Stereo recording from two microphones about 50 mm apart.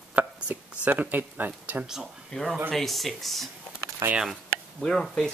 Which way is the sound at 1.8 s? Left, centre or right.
Centre.